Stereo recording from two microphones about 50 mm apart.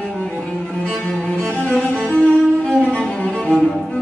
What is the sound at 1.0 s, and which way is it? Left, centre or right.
Music, left.